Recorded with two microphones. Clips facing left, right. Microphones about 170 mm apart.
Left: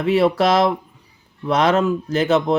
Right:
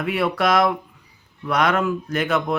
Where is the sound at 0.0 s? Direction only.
30° left (ahead or behind).